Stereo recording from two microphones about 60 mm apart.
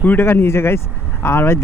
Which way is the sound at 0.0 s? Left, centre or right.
Left.